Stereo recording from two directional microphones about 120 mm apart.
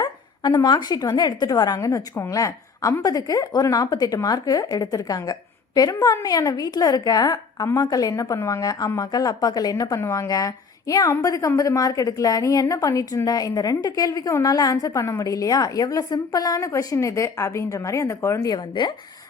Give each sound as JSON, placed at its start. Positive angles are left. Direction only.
{"t": 0.0, "sound": "a woman's voice", "side_deg": 35}